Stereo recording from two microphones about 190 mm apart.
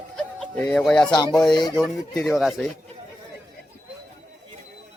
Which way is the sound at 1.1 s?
20° left (ahead or behind).